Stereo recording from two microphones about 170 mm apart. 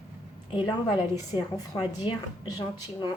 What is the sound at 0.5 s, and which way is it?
A woman's voice, 30° left (ahead or behind).